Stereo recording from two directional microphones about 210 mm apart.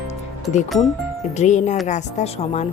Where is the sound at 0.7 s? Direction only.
Centre (ahead or behind).